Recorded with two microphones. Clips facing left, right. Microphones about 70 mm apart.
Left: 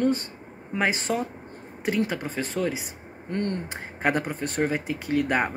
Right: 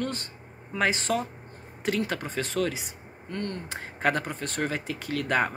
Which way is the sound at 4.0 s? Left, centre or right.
Centre.